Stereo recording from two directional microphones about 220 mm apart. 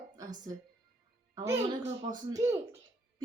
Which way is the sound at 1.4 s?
20° right (ahead or behind).